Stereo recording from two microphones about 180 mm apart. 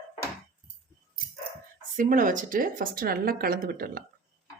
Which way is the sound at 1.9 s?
50° right (ahead or behind).